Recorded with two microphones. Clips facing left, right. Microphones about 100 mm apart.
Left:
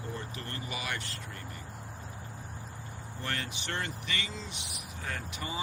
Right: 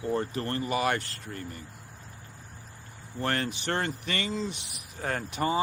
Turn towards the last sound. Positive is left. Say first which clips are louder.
# right 10 dB
turn(degrees=-45)  # may be behind; listen again after turning